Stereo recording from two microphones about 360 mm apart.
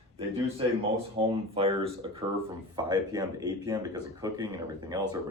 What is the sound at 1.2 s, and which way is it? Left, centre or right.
Speech, centre.